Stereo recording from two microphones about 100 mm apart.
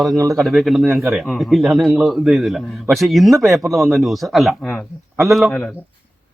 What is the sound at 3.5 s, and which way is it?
Speech, 35° right (ahead or behind).